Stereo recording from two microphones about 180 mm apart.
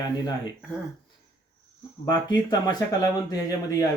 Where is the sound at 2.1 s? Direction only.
25° left (ahead or behind).